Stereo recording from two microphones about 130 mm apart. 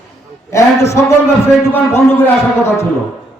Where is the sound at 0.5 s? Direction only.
20° left (ahead or behind).